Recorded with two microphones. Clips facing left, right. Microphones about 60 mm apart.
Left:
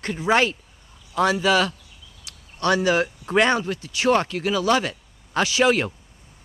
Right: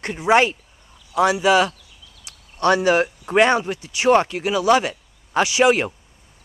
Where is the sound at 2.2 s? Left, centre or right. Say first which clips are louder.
Right 4 dB; right.